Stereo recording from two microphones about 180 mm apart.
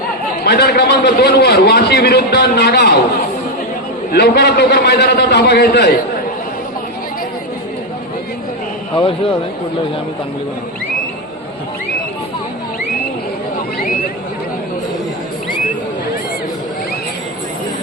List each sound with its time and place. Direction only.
0.4 s a man's voice: 65° left (ahead or behind)
4.1 s a man's voice: 65° left (ahead or behind)